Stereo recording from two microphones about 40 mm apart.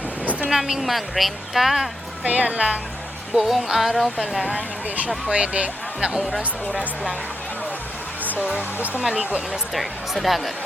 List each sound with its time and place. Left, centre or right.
0.5 s speech: centre
2.2 s speech: right
3.5 s speech: centre
5.3 s speech: right
6.1 s speech: centre
8.2 s music: right
8.4 s speech: right
9.7 s speech: centre